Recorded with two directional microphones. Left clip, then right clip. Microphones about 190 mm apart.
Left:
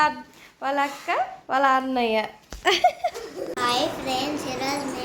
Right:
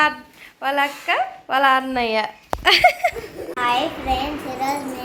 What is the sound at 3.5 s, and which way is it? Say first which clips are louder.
A child's voice: right 4 dB; 15° right (ahead or behind).